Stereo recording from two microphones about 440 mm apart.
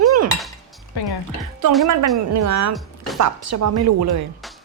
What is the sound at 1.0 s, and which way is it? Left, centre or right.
Speech, left.